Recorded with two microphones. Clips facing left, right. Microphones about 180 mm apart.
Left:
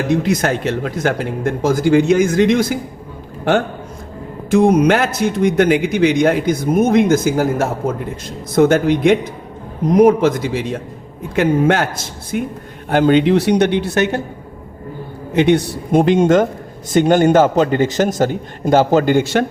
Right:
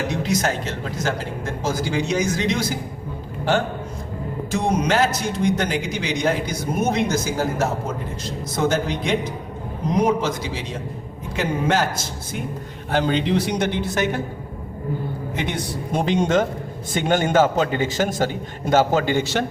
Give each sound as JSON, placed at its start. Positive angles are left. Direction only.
{"t": 0.1, "sound": "a man's voice", "side_deg": 55}
{"t": 4.5, "sound": "a man's voice", "side_deg": 55}
{"t": 8.5, "sound": "a man's voice", "side_deg": 60}
{"t": 12.9, "sound": "a man's voice", "side_deg": 55}
{"t": 15.4, "sound": "a man's voice", "side_deg": 70}